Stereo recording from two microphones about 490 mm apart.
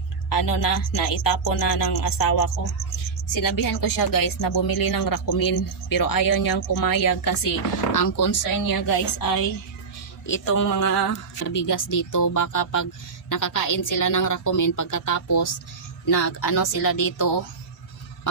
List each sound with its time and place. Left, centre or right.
0.3 s a woman's voice: left